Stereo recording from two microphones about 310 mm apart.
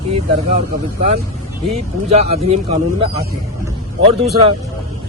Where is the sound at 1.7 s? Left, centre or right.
Centre.